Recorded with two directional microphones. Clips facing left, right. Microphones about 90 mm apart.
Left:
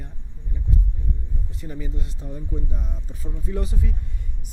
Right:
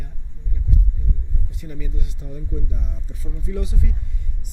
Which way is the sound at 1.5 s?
35° left (ahead or behind).